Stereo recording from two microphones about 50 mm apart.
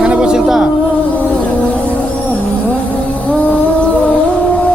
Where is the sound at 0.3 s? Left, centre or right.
Centre.